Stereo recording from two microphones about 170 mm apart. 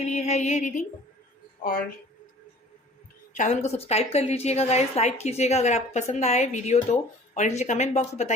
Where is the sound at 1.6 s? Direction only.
55° left (ahead or behind).